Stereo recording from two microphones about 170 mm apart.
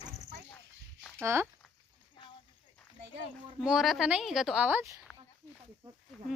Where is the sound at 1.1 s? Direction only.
15° right (ahead or behind).